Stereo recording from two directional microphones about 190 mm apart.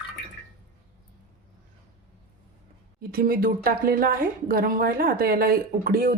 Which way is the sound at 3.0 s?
50° right (ahead or behind).